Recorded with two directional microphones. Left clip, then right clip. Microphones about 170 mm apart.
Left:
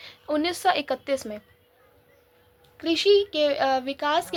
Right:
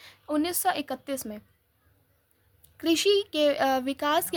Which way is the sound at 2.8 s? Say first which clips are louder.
Left 3 dB; 40° right (ahead or behind).